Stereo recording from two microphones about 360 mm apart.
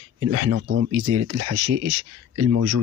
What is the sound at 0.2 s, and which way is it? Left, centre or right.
Speech, right.